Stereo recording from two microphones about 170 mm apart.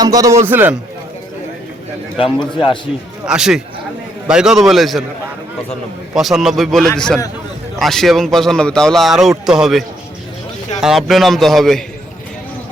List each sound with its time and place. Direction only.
0.0 s a man's voice: 20° right (ahead or behind)
2.1 s a man's voice: 30° left (ahead or behind)
3.2 s speech: 5° right (ahead or behind)
6.1 s speech: centre (ahead or behind)